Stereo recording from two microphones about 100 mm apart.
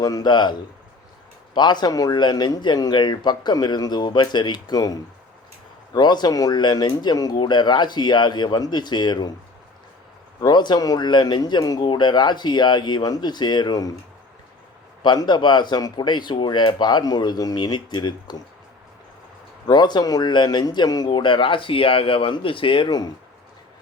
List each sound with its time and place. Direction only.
0.0 s speech: 40° left (ahead or behind)
1.5 s speech: 50° left (ahead or behind)
10.4 s speech: 50° left (ahead or behind)
15.0 s speech: 50° left (ahead or behind)
19.6 s speech: 45° left (ahead or behind)
22.9 s speech: 40° left (ahead or behind)